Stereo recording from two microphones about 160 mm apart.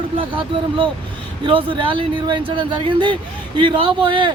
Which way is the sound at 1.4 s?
30° right (ahead or behind).